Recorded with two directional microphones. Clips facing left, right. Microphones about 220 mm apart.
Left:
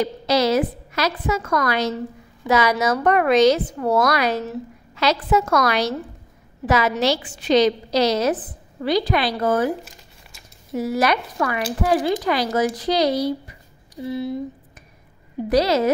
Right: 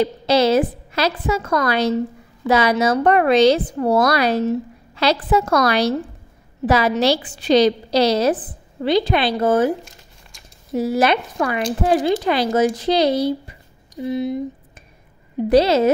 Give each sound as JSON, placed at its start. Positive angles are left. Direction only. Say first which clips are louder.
{"t": 0.0, "sound": "a woman's voice", "louder": "right 3 dB", "side_deg": -30}
{"t": 10.7, "sound": "a woman's voice", "louder": "right 3 dB", "side_deg": -30}
{"t": 15.5, "sound": "a woman's voice", "louder": "right 4 dB", "side_deg": -25}